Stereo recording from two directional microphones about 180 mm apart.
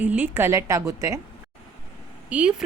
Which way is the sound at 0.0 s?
10° right (ahead or behind).